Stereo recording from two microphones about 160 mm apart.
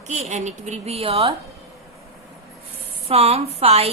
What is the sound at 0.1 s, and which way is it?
A woman's voice, 45° right (ahead or behind).